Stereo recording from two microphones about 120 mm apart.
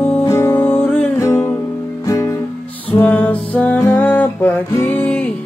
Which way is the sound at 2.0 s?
30° left (ahead or behind).